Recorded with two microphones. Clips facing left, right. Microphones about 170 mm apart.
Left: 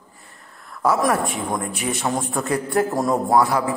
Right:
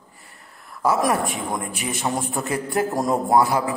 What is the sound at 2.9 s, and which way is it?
Speech, 15° right (ahead or behind).